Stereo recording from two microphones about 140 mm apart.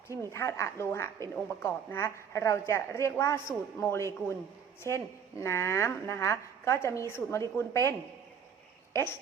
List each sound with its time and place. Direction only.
0.3 s a woman's voice: 20° left (ahead or behind)